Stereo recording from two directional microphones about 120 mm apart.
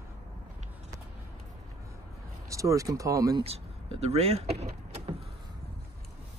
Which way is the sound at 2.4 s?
25° right (ahead or behind).